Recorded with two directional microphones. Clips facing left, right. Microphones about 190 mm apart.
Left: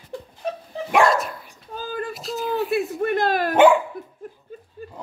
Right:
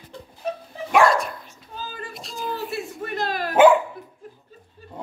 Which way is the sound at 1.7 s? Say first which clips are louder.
Left 7 dB; 55° left (ahead or behind).